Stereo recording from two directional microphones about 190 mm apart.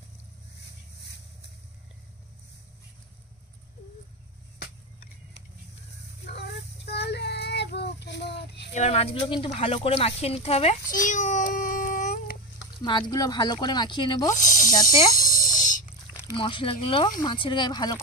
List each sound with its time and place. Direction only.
6.2 s child singing: 60° left (ahead or behind)
8.7 s speech: 35° left (ahead or behind)
10.9 s a sound: 45° left (ahead or behind)
12.8 s speech: 20° left (ahead or behind)
14.3 s speech: 40° left (ahead or behind)
15.0 s a sound: 45° left (ahead or behind)
16.3 s speech: 25° left (ahead or behind)